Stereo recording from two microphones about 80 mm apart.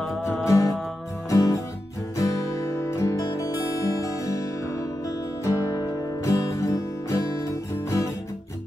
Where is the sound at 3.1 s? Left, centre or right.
Left.